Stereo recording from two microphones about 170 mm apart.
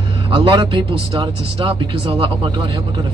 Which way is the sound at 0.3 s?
30° right (ahead or behind).